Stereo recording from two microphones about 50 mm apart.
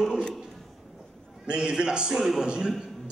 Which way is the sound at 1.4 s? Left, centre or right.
Centre.